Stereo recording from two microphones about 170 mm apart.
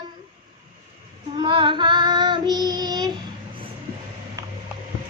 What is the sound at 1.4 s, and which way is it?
Child singing, 30° right (ahead or behind).